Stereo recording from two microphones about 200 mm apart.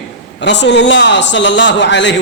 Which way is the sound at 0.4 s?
60° left (ahead or behind).